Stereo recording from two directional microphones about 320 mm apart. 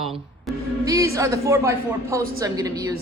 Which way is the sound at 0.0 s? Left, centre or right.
Centre.